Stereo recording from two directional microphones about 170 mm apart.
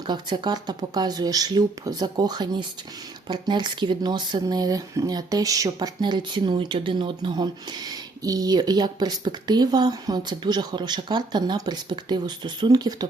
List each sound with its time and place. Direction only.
0.1 s speech: 25° right (ahead or behind)